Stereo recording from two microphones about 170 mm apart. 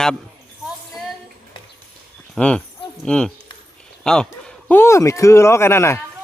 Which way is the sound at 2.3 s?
5° left (ahead or behind).